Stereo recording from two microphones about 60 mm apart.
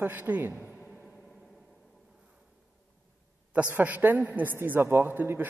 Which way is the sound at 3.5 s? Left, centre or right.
Right.